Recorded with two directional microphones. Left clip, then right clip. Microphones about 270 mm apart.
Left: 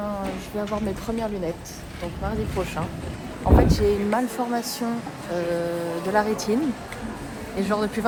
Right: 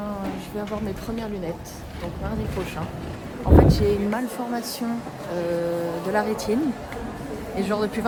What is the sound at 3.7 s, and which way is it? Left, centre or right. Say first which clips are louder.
Speech: even; centre.